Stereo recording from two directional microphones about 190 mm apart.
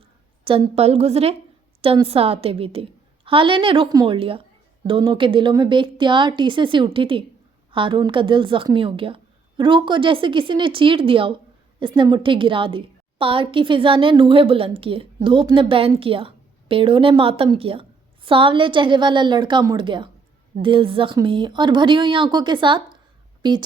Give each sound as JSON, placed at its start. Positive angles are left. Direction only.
{"t": 0.4, "sound": "a woman's voice", "side_deg": -30}